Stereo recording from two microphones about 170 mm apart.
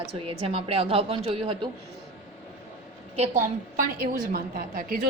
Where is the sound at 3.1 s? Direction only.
45° right (ahead or behind).